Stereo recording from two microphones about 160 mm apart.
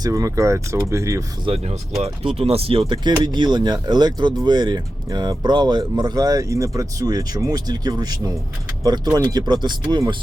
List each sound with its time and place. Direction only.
0.0 s speech: 20° right (ahead or behind)
1.5 s speech: 40° right (ahead or behind)